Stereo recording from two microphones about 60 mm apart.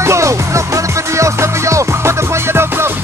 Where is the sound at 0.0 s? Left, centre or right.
Right.